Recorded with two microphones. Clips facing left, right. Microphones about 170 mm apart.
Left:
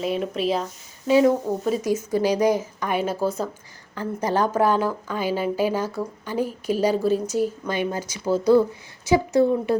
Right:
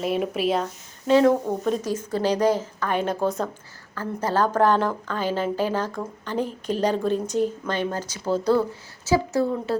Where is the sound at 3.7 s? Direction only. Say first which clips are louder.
Left 2 dB; 15° left (ahead or behind).